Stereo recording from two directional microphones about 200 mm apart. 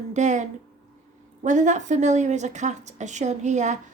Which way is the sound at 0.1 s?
35° right (ahead or behind).